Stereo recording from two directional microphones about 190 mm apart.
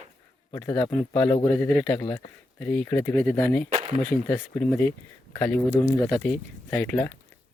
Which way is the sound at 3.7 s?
30° right (ahead or behind).